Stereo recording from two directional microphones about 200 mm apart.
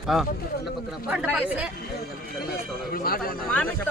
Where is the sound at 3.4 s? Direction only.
5° left (ahead or behind).